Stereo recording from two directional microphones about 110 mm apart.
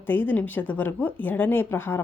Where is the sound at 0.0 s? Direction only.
20° left (ahead or behind).